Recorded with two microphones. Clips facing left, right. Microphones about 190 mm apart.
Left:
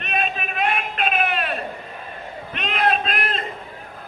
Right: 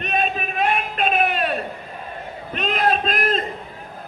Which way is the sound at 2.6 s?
40° right (ahead or behind).